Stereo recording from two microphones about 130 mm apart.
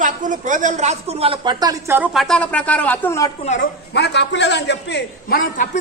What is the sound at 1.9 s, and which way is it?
Speech, 15° right (ahead or behind).